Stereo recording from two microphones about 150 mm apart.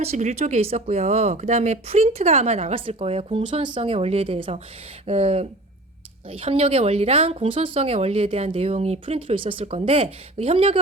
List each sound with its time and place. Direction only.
0.0 s speech: 45° right (ahead or behind)